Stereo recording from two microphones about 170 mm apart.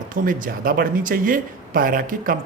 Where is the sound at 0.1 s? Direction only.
55° right (ahead or behind).